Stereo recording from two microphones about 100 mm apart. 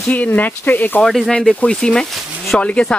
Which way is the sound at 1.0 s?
Centre (ahead or behind).